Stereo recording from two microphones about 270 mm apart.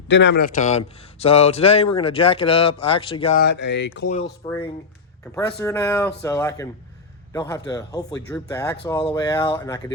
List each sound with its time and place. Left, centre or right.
0.1 s a man's voice: left
3.4 s speech: left
5.3 s speech: centre